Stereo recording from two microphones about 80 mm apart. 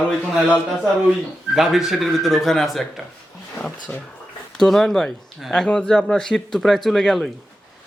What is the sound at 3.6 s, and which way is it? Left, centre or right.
Speech, centre.